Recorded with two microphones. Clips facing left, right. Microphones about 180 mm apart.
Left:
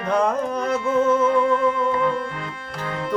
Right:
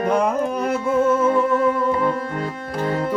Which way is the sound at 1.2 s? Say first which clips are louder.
Right 1 dB; 45° right (ahead or behind).